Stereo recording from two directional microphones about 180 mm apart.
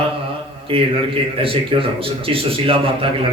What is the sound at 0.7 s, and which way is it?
A man's voice, 30° right (ahead or behind).